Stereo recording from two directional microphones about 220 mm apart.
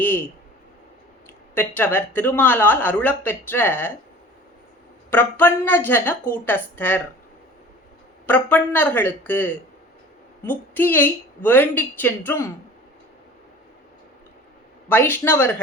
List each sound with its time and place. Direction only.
0.0 s a sound: 10° left (ahead or behind)
1.5 s speech: 10° left (ahead or behind)
5.1 s speech: 10° left (ahead or behind)
8.3 s speech: 10° left (ahead or behind)
14.8 s speech: 10° left (ahead or behind)